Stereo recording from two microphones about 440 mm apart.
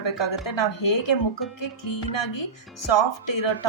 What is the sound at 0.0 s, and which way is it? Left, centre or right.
A woman's voice, left.